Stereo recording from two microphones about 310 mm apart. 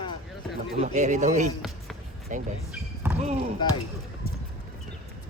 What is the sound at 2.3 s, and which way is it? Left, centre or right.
Speech, right.